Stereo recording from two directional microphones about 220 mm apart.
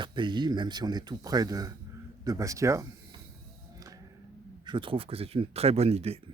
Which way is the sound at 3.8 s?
15° right (ahead or behind).